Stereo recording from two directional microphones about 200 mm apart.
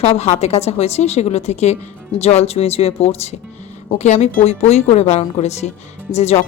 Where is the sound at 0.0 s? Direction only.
35° left (ahead or behind).